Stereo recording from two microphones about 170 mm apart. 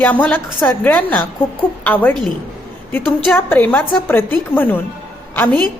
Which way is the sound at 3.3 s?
10° left (ahead or behind).